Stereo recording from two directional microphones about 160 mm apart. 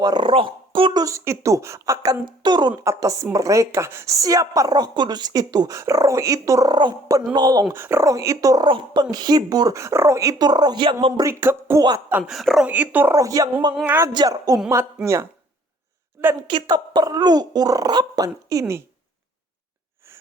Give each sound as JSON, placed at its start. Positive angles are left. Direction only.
{"t": 0.0, "sound": "a woman's voice", "side_deg": -30}
{"t": 7.6, "sound": "a woman's voice", "side_deg": -15}
{"t": 11.2, "sound": "speech", "side_deg": -15}
{"t": 12.3, "sound": "speech", "side_deg": 0}
{"t": 13.7, "sound": "speech", "side_deg": -10}
{"t": 14.1, "sound": "a woman's voice", "side_deg": -25}
{"t": 16.5, "sound": "a woman's voice", "side_deg": -30}